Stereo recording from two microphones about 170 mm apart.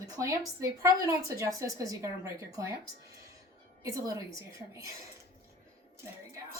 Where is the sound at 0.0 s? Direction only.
20° right (ahead or behind).